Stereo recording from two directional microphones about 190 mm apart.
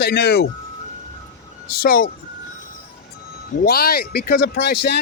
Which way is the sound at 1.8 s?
50° left (ahead or behind).